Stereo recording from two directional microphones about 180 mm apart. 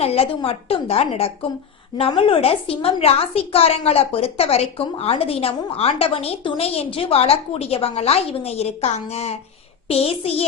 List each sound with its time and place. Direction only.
0.0 s a woman's voice: 35° left (ahead or behind)